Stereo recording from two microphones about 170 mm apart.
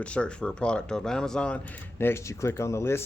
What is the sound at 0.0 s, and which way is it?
Speech, 5° left (ahead or behind).